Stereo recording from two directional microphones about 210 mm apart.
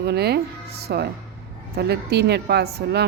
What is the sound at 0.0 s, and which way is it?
A woman's voice, 50° right (ahead or behind).